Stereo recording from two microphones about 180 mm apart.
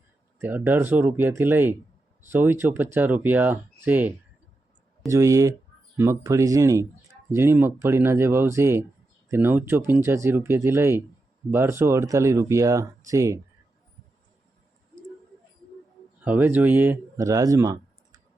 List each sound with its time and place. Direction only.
0.3 s speech: 10° right (ahead or behind)
16.2 s speech: 10° right (ahead or behind)